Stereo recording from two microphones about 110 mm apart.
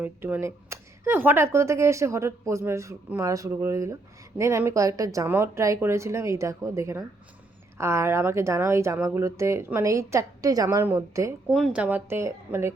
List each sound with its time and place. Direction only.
0.0 s speech: 20° right (ahead or behind)
11.4 s speech: 5° right (ahead or behind); by 12.7 s 25° right (ahead or behind)